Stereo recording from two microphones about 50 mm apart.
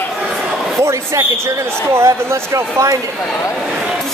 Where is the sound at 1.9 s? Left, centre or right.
Right.